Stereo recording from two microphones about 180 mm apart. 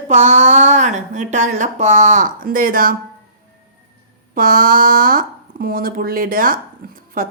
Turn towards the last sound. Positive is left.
turn(degrees=-50)  # may be behind; listen again after turning